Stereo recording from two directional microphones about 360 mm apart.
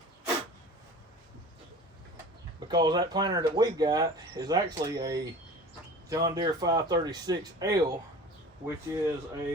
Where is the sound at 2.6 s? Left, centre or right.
Centre.